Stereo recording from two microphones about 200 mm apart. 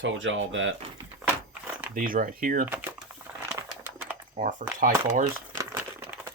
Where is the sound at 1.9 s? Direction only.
45° right (ahead or behind).